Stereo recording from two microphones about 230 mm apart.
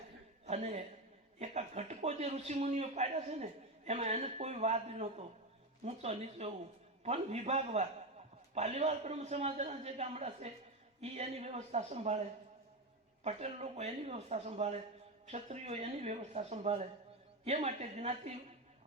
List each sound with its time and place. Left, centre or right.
0.4 s a sound: right
1.4 s a man's voice: right
13.2 s a man's voice: right